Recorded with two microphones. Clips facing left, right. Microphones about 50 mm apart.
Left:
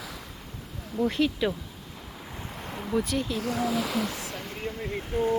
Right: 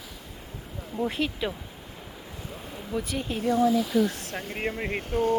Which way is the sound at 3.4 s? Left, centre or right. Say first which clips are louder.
Right 10 dB; left.